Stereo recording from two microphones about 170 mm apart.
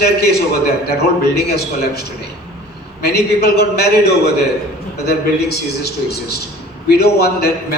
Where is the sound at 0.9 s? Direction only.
70° left (ahead or behind).